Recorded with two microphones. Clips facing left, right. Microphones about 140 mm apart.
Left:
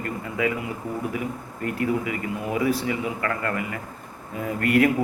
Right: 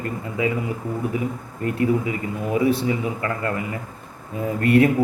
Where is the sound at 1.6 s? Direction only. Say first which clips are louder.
Right 4 dB; 30° right (ahead or behind).